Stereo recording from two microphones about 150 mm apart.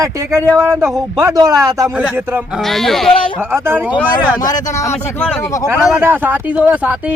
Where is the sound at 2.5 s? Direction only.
Centre (ahead or behind).